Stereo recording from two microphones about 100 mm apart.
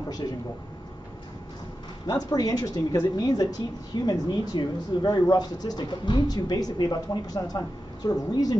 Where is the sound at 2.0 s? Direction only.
40° left (ahead or behind).